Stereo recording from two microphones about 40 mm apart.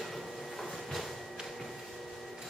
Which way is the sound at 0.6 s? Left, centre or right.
Centre.